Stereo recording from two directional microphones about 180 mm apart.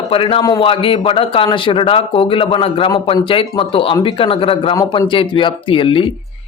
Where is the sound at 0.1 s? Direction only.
30° left (ahead or behind).